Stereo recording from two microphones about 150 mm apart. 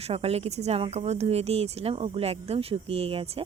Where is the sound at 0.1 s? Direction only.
40° right (ahead or behind).